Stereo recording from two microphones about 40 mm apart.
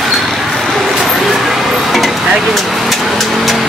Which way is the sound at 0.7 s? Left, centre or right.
Centre.